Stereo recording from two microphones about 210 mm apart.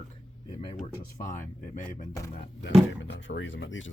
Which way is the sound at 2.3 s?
55° left (ahead or behind).